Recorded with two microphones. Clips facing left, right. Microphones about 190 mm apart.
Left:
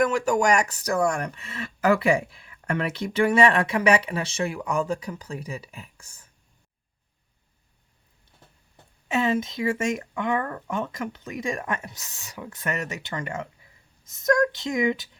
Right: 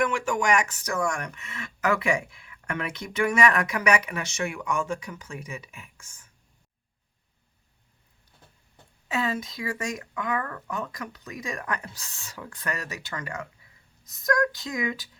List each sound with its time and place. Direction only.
0.0 s speech: 40° left (ahead or behind)
9.0 s speech: 25° left (ahead or behind)